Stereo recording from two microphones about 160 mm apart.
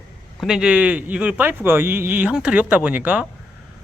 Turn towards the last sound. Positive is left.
turn(degrees=-10)  # may be behind; listen again after turning